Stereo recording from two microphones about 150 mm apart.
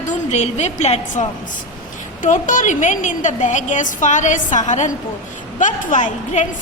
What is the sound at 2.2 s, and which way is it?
A woman's voice, 60° left (ahead or behind).